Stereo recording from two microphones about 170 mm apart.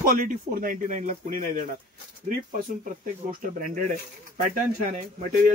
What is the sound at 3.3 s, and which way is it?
Speech, 50° right (ahead or behind).